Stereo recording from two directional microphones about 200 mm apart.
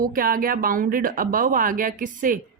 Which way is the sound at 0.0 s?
45° right (ahead or behind).